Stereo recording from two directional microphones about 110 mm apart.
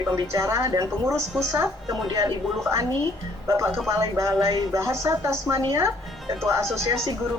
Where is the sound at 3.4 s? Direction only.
25° right (ahead or behind).